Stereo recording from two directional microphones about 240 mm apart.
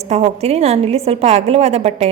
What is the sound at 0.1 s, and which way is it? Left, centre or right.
A woman's voice, right.